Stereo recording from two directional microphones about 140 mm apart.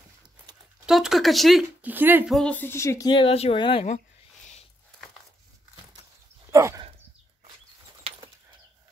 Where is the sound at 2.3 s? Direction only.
10° left (ahead or behind).